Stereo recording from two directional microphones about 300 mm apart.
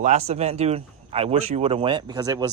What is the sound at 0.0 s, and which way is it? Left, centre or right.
A man's voice, right.